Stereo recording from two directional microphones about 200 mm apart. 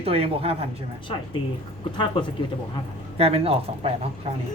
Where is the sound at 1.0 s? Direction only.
25° left (ahead or behind).